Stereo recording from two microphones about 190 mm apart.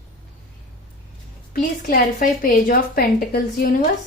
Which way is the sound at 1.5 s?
45° left (ahead or behind).